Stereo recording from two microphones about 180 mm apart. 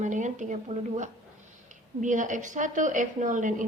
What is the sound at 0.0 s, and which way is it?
A woman's voice, 40° right (ahead or behind).